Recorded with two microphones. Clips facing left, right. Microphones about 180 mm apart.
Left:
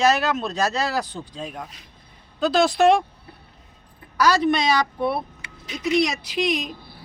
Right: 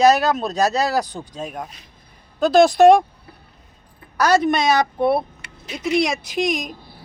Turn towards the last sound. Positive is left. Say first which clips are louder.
# right 2 dB
turn(degrees=-45)  # may be behind; listen again after turning